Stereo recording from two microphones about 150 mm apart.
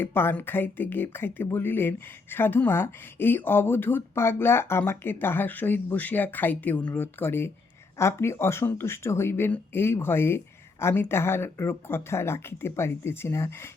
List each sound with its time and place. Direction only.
0.0 s speech: 15° left (ahead or behind)